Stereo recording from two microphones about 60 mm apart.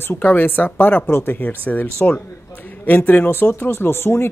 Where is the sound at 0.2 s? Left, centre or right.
Left.